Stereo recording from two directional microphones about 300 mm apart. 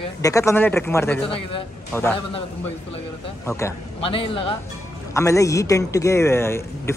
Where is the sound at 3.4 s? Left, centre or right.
Centre.